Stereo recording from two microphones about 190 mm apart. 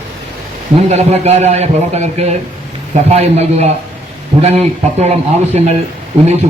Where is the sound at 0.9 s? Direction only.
35° right (ahead or behind).